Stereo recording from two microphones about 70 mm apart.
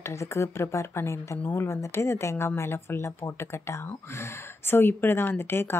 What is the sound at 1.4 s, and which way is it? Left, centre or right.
Speech, left.